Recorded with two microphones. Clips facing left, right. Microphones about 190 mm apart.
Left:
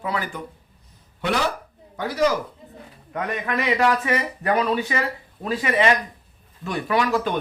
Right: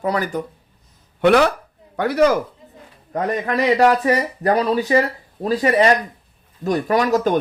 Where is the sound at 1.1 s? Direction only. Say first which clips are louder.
Right 10 dB; 60° right (ahead or behind).